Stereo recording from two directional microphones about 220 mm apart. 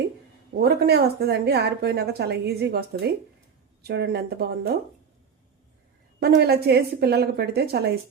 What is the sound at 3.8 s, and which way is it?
Speech, 45° right (ahead or behind).